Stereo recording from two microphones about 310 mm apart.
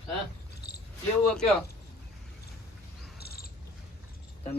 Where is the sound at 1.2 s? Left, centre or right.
Centre.